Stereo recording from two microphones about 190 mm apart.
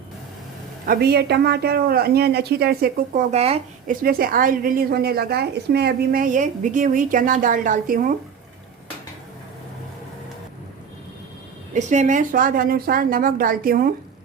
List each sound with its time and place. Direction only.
0.9 s speech: 55° right (ahead or behind); by 3.9 s 35° right (ahead or behind)
4.0 s a woman's voice: 50° right (ahead or behind)
11.7 s a woman's voice: 40° right (ahead or behind)